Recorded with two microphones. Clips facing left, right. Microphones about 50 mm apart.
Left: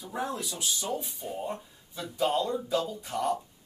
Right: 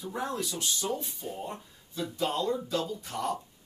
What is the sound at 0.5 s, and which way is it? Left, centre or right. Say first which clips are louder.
Speech: right 1 dB; centre.